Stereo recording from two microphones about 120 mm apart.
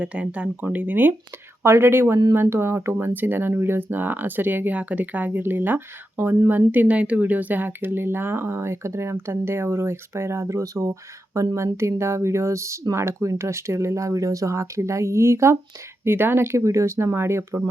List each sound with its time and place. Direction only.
0.0 s speech: 10° right (ahead or behind)